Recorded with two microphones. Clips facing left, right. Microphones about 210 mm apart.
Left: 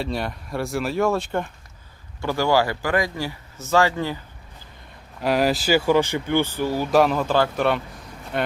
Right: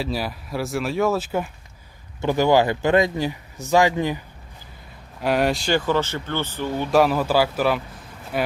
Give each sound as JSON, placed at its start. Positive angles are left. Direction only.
{"t": 0.0, "sound": "speech", "side_deg": -5}
{"t": 2.2, "sound": "speech", "side_deg": -20}
{"t": 5.2, "sound": "speech", "side_deg": 0}